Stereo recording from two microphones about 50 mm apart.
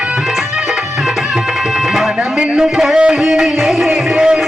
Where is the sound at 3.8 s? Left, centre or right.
Centre.